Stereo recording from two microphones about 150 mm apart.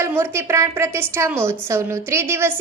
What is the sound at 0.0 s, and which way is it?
A woman's voice, 15° right (ahead or behind).